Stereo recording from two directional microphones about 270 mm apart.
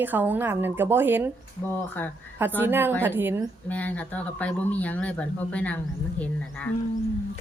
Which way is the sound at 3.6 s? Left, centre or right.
Centre.